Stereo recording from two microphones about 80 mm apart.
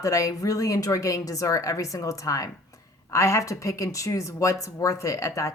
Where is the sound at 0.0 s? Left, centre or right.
Left.